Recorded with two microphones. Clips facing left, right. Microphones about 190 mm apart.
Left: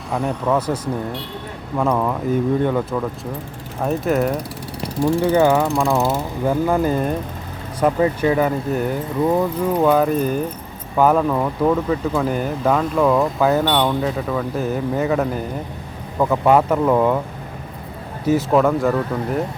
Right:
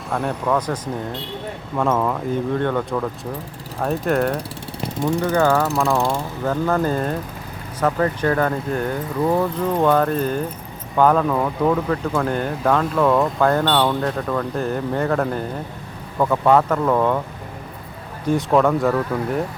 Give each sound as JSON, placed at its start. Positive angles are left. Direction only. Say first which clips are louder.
{"t": 0.3, "sound": "speech", "louder": "left 2 dB", "side_deg": 10}
{"t": 1.8, "sound": "speech", "louder": "left 1 dB", "side_deg": 5}
{"t": 3.8, "sound": "speech", "louder": "left 1 dB", "side_deg": 5}
{"t": 4.4, "sound": "vehicle", "louder": "left 1 dB", "side_deg": -25}
{"t": 5.3, "sound": "speech", "louder": "left 2 dB", "side_deg": 15}
{"t": 5.6, "sound": "speech", "louder": "left 1 dB", "side_deg": 0}
{"t": 18.3, "sound": "speech", "louder": "left 1 dB", "side_deg": 5}